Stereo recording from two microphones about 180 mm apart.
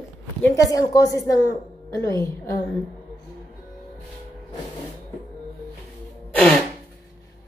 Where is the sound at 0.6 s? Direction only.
20° left (ahead or behind).